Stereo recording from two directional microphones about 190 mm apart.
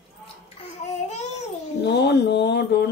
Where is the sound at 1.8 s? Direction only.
60° left (ahead or behind).